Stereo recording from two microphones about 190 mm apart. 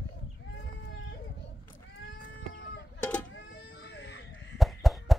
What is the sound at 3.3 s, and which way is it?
Baby cry, 60° left (ahead or behind).